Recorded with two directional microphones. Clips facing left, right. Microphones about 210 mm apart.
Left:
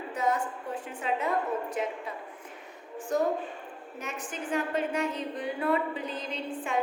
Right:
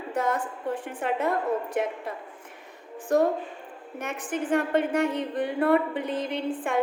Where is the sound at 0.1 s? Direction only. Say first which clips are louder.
Right 2 dB; 55° right (ahead or behind).